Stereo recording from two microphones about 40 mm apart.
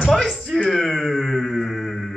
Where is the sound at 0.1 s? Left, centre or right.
Centre.